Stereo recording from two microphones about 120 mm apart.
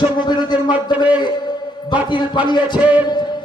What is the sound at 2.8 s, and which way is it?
Music, 10° right (ahead or behind).